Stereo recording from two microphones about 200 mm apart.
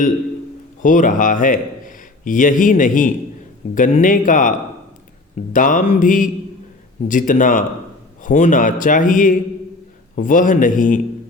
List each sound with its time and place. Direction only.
0.8 s a man's voice: 40° left (ahead or behind)
5.5 s speech: 40° left (ahead or behind)